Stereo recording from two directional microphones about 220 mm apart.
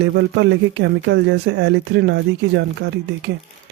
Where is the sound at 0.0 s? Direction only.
50° right (ahead or behind).